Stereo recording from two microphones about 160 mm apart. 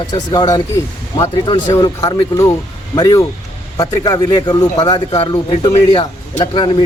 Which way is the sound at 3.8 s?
25° left (ahead or behind).